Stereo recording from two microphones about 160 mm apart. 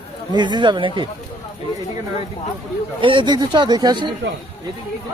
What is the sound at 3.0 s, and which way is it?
Speech, 30° right (ahead or behind).